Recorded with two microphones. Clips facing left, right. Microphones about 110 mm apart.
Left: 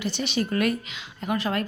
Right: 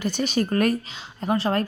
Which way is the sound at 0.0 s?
45° right (ahead or behind).